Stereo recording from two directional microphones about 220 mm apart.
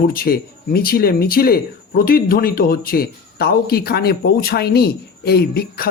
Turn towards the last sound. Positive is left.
turn(degrees=45)  # may be behind; listen again after turning